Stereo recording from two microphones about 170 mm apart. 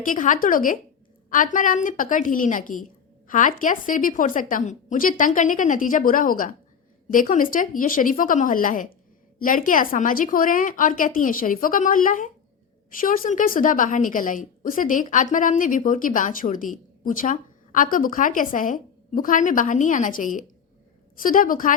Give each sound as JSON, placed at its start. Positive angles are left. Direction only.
{"t": 0.0, "sound": "a woman's voice", "side_deg": 50}